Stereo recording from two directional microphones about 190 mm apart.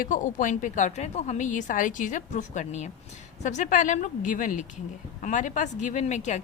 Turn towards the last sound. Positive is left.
turn(degrees=40)  # may be behind; listen again after turning